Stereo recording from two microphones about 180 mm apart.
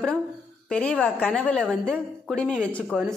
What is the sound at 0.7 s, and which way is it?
A woman's voice, 5° left (ahead or behind).